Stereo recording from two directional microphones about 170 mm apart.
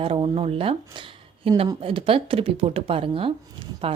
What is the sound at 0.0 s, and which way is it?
Speech, 35° right (ahead or behind).